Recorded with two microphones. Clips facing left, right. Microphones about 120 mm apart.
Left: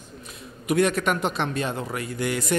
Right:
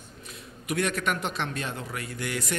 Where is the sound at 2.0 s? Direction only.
20° left (ahead or behind).